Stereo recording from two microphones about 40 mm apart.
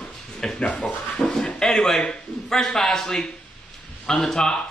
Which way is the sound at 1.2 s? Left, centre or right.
Centre.